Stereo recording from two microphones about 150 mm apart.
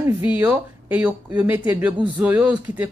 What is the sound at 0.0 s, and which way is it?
Speech, 15° right (ahead or behind).